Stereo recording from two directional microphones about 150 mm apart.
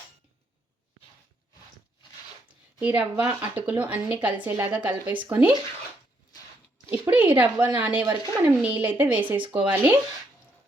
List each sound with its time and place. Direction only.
2.8 s a woman's voice: 10° right (ahead or behind)
7.0 s a woman's voice: 10° right (ahead or behind)
9.4 s speech: 35° right (ahead or behind)
9.6 s a woman's voice: 10° right (ahead or behind)